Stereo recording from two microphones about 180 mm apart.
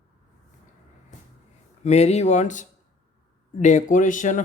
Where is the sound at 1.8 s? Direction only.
35° left (ahead or behind).